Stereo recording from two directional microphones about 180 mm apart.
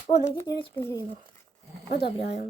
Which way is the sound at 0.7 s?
15° left (ahead or behind).